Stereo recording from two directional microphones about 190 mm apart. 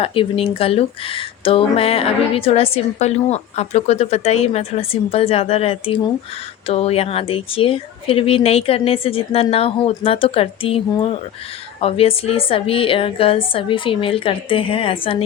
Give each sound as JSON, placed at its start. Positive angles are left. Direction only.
{"t": 0.0, "sound": "a woman's voice", "side_deg": 30}